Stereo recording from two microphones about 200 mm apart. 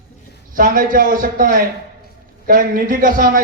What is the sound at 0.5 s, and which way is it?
A man's voice, 45° right (ahead or behind).